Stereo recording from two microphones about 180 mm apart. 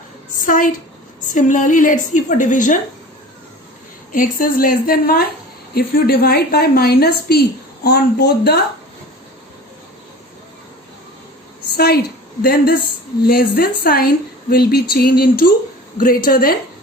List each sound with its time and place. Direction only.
0.3 s a sound: 50° left (ahead or behind)
1.3 s a woman's voice: 45° left (ahead or behind)
4.1 s a woman's voice: 50° left (ahead or behind)
11.8 s a woman's voice: 60° left (ahead or behind)